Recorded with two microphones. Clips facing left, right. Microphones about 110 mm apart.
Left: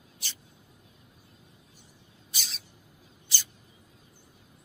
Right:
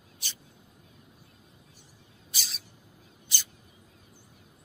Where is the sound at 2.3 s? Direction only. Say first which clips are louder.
Even; centre (ahead or behind).